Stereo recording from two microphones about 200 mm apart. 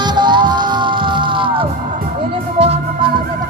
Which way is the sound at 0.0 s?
20° right (ahead or behind).